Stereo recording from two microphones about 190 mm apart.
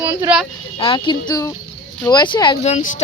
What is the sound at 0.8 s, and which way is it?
A woman's voice, 25° left (ahead or behind).